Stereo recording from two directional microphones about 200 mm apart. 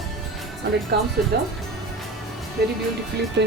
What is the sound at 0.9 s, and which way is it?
Speech, 55° right (ahead or behind).